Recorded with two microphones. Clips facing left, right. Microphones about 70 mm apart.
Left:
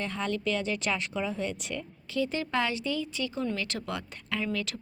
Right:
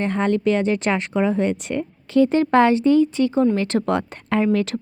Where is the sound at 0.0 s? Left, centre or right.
Right.